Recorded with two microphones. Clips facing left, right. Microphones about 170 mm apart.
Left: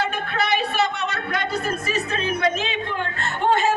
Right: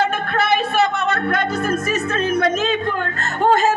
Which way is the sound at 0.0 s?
50° right (ahead or behind).